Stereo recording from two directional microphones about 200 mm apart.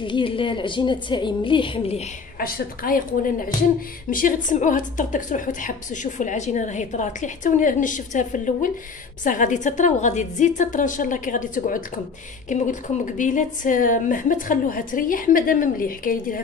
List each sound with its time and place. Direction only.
0.0 s a woman's voice: 25° left (ahead or behind)
2.3 s a woman's voice: 45° left (ahead or behind)
4.1 s a woman's voice: 40° left (ahead or behind)
13.0 s a woman's voice: 40° left (ahead or behind)